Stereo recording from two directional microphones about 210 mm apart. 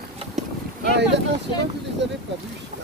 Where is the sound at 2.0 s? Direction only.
55° right (ahead or behind).